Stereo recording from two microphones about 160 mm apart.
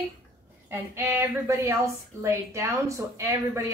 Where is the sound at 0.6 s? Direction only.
15° right (ahead or behind).